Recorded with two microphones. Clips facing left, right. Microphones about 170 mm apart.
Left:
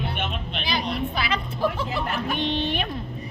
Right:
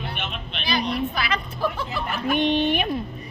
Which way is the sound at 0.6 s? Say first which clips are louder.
Right 3 dB; 25° left (ahead or behind).